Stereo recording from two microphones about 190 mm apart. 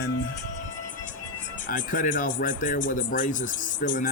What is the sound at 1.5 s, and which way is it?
Speech, 45° left (ahead or behind).